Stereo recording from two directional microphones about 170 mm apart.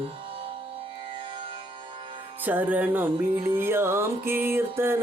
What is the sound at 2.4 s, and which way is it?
Music, 10° right (ahead or behind).